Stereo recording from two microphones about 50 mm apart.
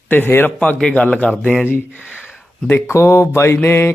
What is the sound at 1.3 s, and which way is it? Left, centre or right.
Speech, centre.